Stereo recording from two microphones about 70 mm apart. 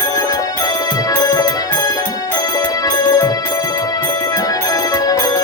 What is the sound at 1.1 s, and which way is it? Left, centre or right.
Music, left.